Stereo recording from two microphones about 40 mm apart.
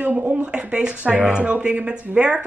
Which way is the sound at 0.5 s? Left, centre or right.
Right.